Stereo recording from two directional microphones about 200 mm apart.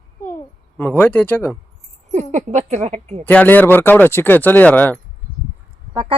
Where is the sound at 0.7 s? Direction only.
10° left (ahead or behind).